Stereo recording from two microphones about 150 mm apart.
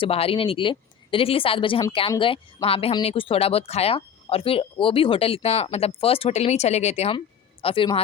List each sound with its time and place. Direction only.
0.0 s a man's voice: 40° left (ahead or behind)